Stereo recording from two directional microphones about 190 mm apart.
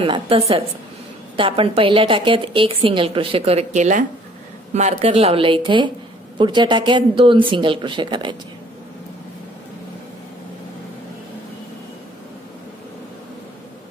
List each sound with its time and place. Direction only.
0.0 s a woman's voice: 30° right (ahead or behind)